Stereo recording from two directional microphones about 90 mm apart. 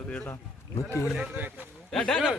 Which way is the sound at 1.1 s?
15° right (ahead or behind).